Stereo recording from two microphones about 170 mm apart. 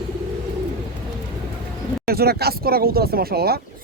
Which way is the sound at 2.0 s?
65° right (ahead or behind).